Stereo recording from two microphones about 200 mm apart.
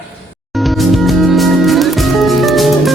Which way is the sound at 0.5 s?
Centre (ahead or behind).